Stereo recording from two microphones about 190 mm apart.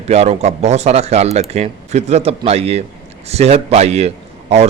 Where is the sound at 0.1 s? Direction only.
35° right (ahead or behind).